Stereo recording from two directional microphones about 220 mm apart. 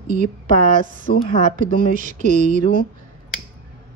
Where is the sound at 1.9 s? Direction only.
35° right (ahead or behind).